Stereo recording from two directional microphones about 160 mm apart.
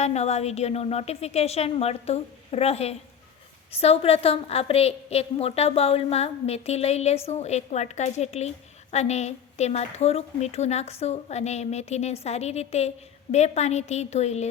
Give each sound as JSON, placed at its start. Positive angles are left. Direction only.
{"t": 0.0, "sound": "a woman's voice", "side_deg": 45}